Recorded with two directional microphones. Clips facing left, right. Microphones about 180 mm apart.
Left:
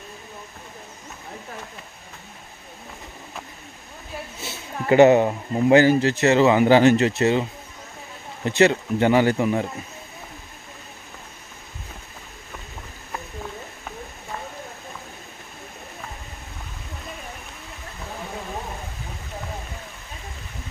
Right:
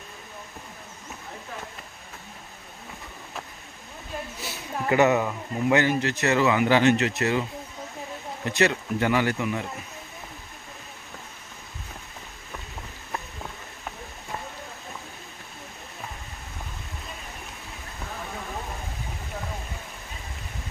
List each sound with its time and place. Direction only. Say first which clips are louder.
4.4 s speech: left 1 dB; 25° left (ahead or behind)
8.5 s speech: left 6 dB; 25° left (ahead or behind)